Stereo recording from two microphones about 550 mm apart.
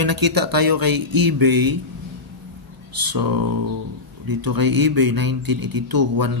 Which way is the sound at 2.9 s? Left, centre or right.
Right.